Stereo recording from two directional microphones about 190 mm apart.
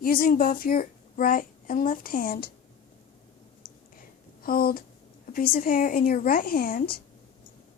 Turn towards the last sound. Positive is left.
turn(degrees=50)  # may be behind; listen again after turning